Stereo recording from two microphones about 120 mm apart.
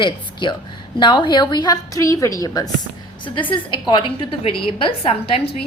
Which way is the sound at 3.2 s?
40° left (ahead or behind).